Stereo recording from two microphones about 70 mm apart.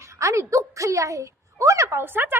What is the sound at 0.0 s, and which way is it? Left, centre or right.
A woman's voice, right.